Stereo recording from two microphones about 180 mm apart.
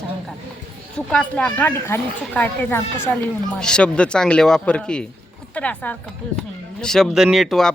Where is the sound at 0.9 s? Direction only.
5° left (ahead or behind).